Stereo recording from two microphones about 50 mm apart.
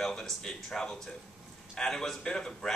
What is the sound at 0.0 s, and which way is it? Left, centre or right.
Speech, centre.